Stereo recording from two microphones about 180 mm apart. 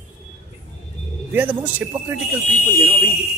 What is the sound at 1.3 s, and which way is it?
Speech, 10° right (ahead or behind).